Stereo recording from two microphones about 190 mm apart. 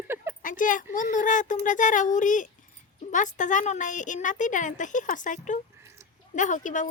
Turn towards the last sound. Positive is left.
turn(degrees=40)  # may be behind; listen again after turning